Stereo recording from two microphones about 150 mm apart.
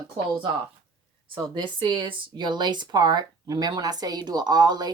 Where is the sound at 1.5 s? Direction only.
30° right (ahead or behind).